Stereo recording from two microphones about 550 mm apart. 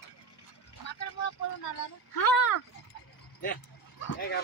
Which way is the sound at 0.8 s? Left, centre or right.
Left.